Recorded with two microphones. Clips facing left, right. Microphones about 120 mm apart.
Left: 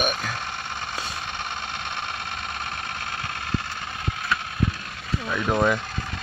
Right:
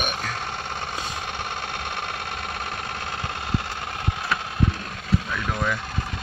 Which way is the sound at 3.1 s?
20° right (ahead or behind).